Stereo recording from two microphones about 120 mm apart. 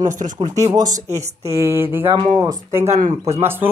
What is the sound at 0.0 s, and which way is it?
Speech, 90° right.